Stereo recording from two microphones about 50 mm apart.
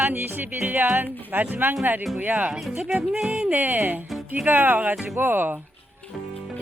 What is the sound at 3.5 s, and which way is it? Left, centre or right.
A woman's voice, right.